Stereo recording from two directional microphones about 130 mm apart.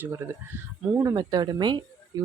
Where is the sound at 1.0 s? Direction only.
30° right (ahead or behind).